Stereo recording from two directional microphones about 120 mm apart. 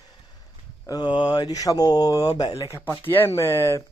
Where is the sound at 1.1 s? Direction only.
35° left (ahead or behind).